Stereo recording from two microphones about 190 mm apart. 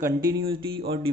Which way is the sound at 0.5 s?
25° right (ahead or behind).